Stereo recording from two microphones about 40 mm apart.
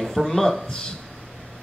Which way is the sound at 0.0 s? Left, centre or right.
Centre.